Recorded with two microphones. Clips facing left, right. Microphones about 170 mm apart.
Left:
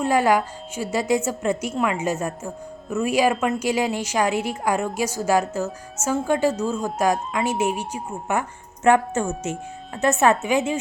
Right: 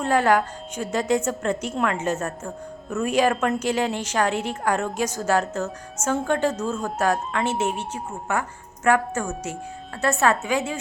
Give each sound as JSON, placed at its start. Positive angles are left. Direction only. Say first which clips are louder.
{"t": 0.0, "sound": "a woman's voice", "louder": "left 1 dB", "side_deg": 10}